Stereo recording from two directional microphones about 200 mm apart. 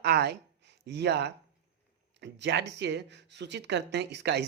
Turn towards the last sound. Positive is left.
turn(degrees=-60)  # may be behind; listen again after turning